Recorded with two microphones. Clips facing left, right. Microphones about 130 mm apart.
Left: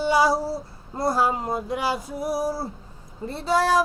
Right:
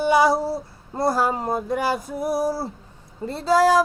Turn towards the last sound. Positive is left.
turn(degrees=-90)